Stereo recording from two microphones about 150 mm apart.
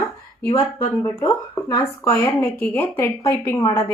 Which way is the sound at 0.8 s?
15° left (ahead or behind).